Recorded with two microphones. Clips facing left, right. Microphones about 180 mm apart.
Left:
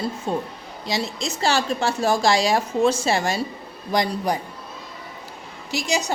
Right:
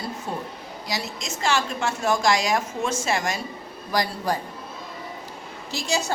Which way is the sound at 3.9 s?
20° left (ahead or behind).